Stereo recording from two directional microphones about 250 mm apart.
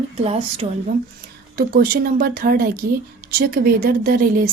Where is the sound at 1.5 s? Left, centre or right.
Right.